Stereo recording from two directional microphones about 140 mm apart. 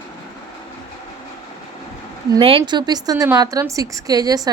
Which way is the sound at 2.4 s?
40° right (ahead or behind).